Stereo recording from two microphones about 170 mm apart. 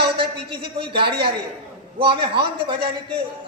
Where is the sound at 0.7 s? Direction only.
30° right (ahead or behind).